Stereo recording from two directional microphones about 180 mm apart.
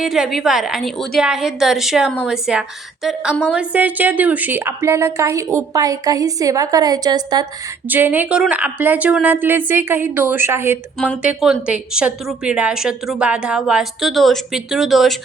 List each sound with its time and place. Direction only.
0.0 s a woman's voice: centre (ahead or behind); by 7.4 s 20° right (ahead or behind)
7.9 s a woman's voice: 10° right (ahead or behind)
10.9 s speech: 5° left (ahead or behind)
11.2 s a woman's voice: 5° right (ahead or behind)